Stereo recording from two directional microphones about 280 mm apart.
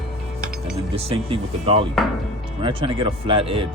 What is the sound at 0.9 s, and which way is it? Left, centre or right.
Speech, right.